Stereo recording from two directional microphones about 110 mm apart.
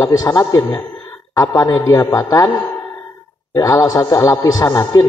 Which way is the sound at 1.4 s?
30° left (ahead or behind).